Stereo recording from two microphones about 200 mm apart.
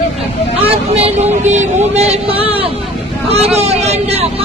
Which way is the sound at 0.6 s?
30° right (ahead or behind).